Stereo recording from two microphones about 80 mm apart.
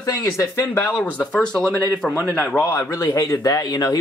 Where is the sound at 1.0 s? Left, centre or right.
Centre.